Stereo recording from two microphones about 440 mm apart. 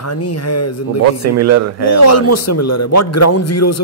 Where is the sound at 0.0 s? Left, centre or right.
Left.